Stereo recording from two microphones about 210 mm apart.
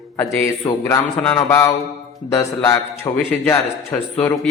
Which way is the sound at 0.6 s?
15° left (ahead or behind).